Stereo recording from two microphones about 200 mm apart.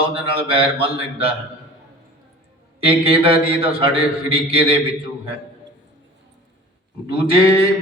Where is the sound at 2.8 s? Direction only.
30° right (ahead or behind).